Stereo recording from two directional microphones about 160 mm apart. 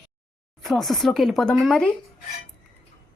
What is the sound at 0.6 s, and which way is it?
Speech, centre (ahead or behind).